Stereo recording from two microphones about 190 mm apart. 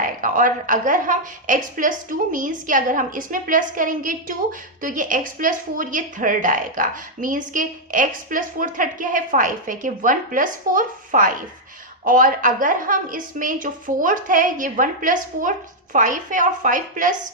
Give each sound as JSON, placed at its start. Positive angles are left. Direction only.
{"t": 0.0, "sound": "a woman's voice", "side_deg": -45}